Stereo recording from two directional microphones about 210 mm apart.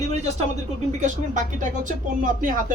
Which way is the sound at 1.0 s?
35° right (ahead or behind).